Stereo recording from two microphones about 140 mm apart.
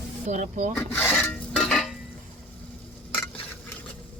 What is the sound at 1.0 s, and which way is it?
Dishes, 5° left (ahead or behind).